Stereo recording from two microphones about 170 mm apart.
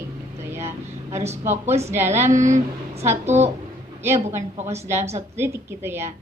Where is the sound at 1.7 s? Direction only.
40° right (ahead or behind).